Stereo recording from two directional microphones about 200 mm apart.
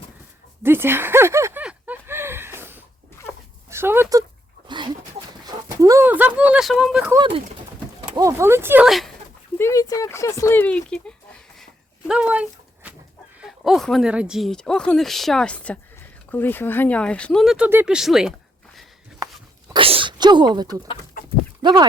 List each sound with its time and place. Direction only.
0.6 s a sound: 10° right (ahead or behind)
4.7 s dog: 25° right (ahead or behind)
5.5 s a sound: 15° right (ahead or behind)
7.1 s speech: 25° right (ahead or behind)
8.1 s speech: 15° right (ahead or behind)
9.6 s a sound: 15° left (ahead or behind); by 12.9 s 5° right (ahead or behind)
13.4 s speech: centre (ahead or behind)
19.7 s sneeze: 25° right (ahead or behind)
21.6 s speech: 20° right (ahead or behind)